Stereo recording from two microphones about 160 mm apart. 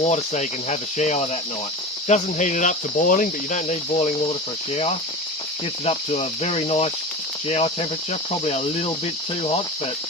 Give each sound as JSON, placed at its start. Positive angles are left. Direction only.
{"t": 0.0, "sound": "speech", "side_deg": 45}
{"t": 4.7, "sound": "cricket", "side_deg": 40}